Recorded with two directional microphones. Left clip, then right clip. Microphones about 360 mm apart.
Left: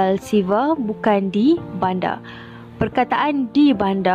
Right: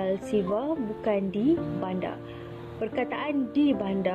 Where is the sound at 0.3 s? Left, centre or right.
Left.